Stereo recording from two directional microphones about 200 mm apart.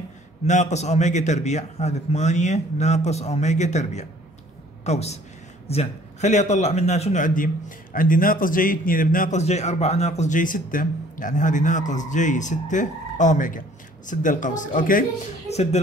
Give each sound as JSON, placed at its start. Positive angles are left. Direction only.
{"t": 0.5, "sound": "a man's voice", "side_deg": 35}